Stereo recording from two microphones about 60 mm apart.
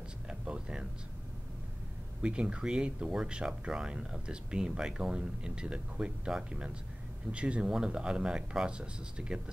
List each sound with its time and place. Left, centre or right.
0.3 s music: centre
2.2 s speech: centre